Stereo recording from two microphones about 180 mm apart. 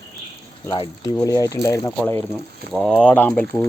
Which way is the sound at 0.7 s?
20° left (ahead or behind).